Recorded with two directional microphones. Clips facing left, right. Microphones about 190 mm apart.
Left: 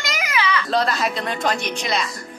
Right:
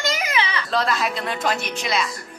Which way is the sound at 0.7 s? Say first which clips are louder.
Even; centre (ahead or behind).